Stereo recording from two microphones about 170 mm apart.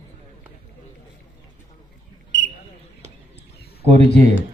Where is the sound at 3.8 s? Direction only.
40° right (ahead or behind).